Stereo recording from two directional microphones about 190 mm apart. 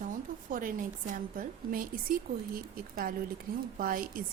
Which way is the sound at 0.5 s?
45° right (ahead or behind).